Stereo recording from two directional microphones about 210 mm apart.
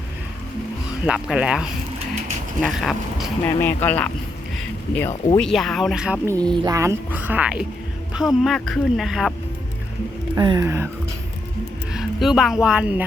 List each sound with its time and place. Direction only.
1.0 s speech: 5° right (ahead or behind)
3.4 s speech: 10° left (ahead or behind)
4.5 s a sound: 10° left (ahead or behind)
5.4 s speech: centre (ahead or behind)
10.3 s speech: 20° right (ahead or behind)
11.9 s speech: centre (ahead or behind)